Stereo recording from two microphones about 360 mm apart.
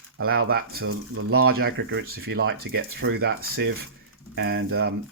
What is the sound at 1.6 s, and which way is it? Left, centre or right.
Speech, right.